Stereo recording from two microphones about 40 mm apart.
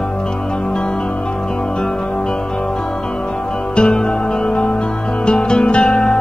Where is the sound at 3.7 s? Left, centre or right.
Left.